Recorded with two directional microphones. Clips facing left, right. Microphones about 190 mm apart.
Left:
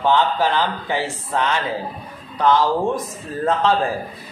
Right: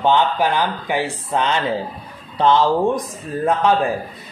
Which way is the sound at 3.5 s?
15° right (ahead or behind).